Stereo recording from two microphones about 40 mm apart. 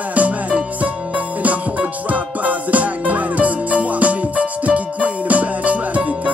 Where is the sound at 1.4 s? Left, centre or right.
Right.